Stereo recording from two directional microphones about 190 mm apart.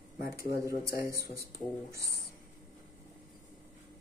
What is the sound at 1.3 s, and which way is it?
Speech, 15° right (ahead or behind).